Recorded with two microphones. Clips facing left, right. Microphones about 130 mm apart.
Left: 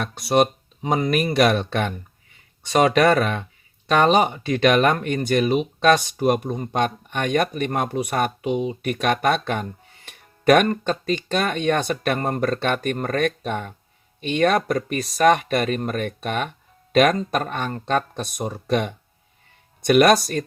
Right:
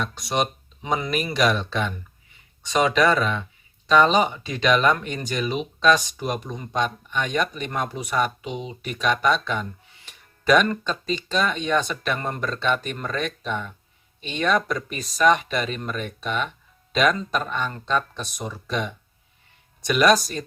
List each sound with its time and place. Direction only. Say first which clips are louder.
0.0 s speech: left 6 dB; 55° left (ahead or behind)